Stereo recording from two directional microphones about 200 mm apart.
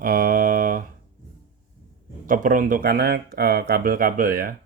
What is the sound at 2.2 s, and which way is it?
Speech, 40° right (ahead or behind).